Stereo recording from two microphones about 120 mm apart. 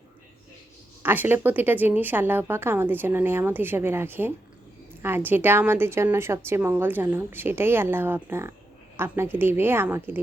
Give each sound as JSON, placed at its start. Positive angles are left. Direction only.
{"t": 1.0, "sound": "a woman's voice", "side_deg": -15}